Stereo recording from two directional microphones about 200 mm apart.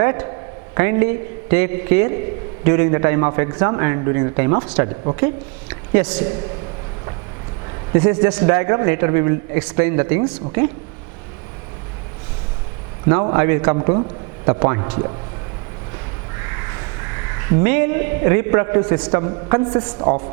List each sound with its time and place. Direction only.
0.0 s a man's voice: 15° right (ahead or behind)
7.9 s a man's voice: 20° right (ahead or behind)
13.1 s a man's voice: 20° right (ahead or behind)
13.7 s a man's voice: 25° right (ahead or behind)
16.4 s crow: 20° right (ahead or behind)
19.1 s a man's voice: 25° right (ahead or behind)